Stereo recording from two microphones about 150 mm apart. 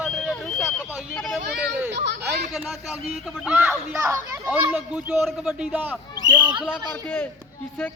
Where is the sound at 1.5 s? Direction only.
90° right.